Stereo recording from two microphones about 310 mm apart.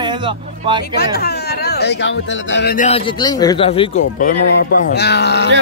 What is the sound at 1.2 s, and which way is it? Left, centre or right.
Speech, left.